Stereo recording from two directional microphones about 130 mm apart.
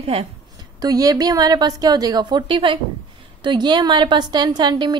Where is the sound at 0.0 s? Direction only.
45° right (ahead or behind).